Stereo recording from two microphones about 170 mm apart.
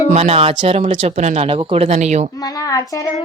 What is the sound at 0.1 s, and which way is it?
Speech, 35° right (ahead or behind).